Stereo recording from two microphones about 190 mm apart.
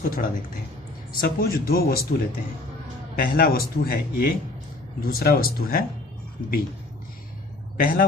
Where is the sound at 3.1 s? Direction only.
50° left (ahead or behind).